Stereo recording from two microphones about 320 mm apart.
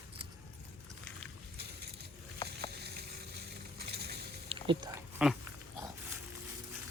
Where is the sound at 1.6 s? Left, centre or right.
Right.